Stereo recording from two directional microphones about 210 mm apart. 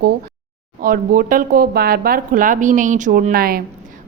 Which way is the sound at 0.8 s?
40° right (ahead or behind).